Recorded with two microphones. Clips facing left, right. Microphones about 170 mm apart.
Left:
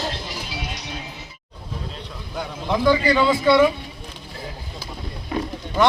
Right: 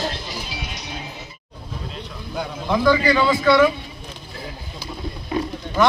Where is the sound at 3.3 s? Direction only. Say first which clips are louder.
Even; 25° left (ahead or behind).